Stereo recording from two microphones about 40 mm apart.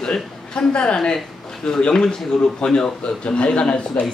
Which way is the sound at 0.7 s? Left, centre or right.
Left.